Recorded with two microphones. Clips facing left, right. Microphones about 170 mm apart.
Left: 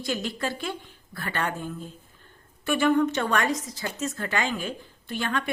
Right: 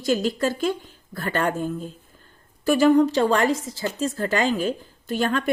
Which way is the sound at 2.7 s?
35° right (ahead or behind).